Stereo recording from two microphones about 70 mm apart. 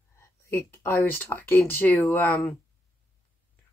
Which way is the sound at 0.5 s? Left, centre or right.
Left.